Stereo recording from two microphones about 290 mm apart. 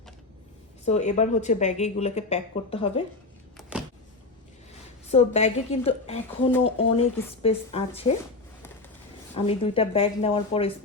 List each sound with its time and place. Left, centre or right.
0.9 s speech: left
3.6 s a sound: centre
5.1 s speech: left
9.3 s speech: centre